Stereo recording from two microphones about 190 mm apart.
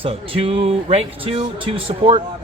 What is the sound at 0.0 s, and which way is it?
A man's voice, 30° right (ahead or behind).